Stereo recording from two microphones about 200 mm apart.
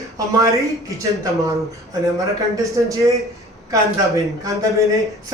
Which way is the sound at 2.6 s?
15° right (ahead or behind).